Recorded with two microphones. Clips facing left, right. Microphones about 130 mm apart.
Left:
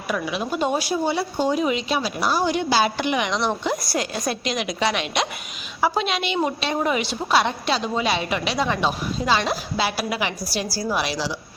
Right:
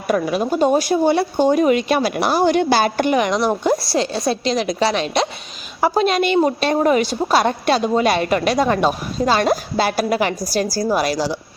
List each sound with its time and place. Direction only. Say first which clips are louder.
0.1 s a woman's voice: right 7 dB; 45° right (ahead or behind)
3.8 s a woman's voice: right 6 dB; 30° right (ahead or behind); by 11.3 s 45° right (ahead or behind)